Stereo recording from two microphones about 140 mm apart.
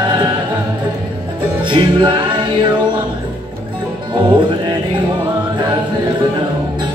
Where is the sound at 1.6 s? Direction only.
35° right (ahead or behind).